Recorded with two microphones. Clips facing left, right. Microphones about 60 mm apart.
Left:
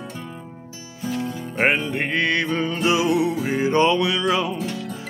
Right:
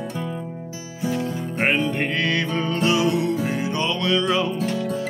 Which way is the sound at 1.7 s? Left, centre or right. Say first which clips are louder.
Right 1 dB; centre.